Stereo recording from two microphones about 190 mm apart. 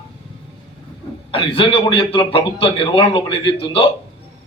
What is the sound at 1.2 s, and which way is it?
A man's voice, 30° left (ahead or behind).